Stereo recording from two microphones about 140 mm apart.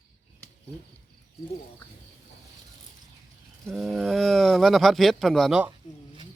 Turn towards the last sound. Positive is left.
turn(degrees=-35)  # may be behind; listen again after turning